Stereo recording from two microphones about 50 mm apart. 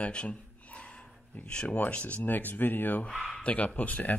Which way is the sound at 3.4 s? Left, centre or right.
Left.